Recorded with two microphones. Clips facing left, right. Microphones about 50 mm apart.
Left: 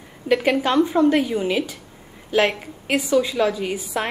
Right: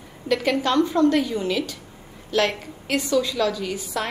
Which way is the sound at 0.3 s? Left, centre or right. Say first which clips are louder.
Left 3 dB; centre.